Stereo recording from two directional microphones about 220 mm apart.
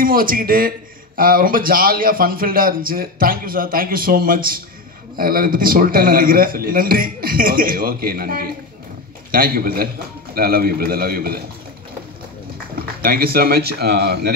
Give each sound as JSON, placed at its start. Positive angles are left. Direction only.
{"t": 0.0, "sound": "a man's voice", "side_deg": -40}
{"t": 12.7, "sound": "speech", "side_deg": -40}